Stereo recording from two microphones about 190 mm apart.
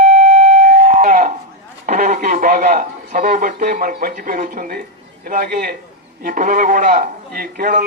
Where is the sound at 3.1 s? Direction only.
45° right (ahead or behind).